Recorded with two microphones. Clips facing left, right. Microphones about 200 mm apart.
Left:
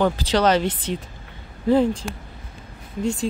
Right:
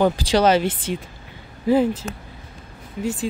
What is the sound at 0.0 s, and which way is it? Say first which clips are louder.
Speech: right 2 dB; 10° right (ahead or behind).